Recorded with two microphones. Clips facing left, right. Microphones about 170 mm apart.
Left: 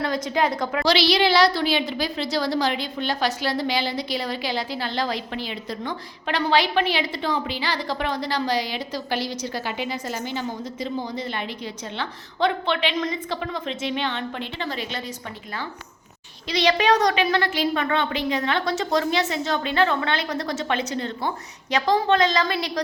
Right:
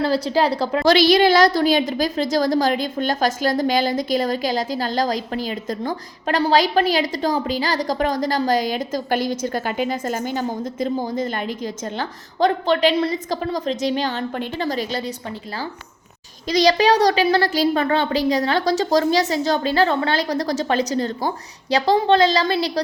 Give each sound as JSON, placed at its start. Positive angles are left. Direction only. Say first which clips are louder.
{"t": 0.0, "sound": "a woman's voice", "louder": "right 5 dB", "side_deg": -30}
{"t": 0.9, "sound": "a woman's voice", "louder": "right 6 dB", "side_deg": -50}
{"t": 16.5, "sound": "a woman's voice", "louder": "right 4 dB", "side_deg": -40}